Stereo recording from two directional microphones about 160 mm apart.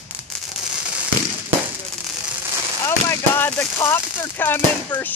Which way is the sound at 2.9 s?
15° left (ahead or behind).